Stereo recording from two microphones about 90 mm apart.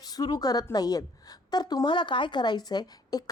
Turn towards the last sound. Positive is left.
turn(degrees=50)  # may be behind; listen again after turning